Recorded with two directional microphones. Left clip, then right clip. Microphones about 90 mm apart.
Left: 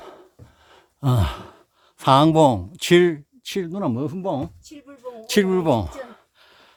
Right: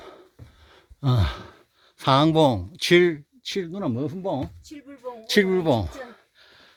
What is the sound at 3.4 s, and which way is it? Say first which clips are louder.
Speech: left 3 dB; 45° left (ahead or behind).